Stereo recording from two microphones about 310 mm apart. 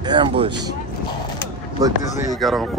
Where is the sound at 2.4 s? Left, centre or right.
Centre.